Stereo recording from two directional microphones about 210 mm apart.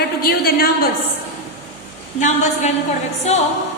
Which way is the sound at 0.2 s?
45° left (ahead or behind).